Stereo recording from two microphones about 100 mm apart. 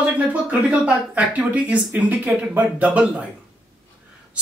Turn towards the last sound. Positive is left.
turn(degrees=-10)  # may be behind; listen again after turning